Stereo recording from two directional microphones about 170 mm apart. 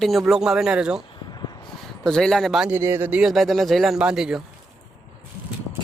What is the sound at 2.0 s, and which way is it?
Speech, 5° left (ahead or behind).